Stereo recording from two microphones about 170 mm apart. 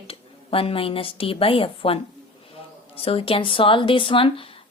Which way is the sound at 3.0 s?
35° left (ahead or behind).